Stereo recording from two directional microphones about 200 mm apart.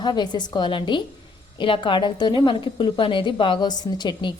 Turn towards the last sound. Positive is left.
turn(degrees=20)  # may be behind; listen again after turning